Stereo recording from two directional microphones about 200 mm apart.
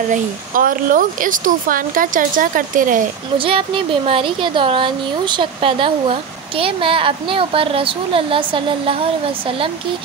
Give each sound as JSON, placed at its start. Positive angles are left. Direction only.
{"t": 0.1, "sound": "speech", "side_deg": -45}
{"t": 3.3, "sound": "speech", "side_deg": -25}